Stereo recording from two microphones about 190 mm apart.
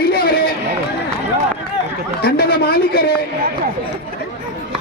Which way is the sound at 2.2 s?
55° left (ahead or behind).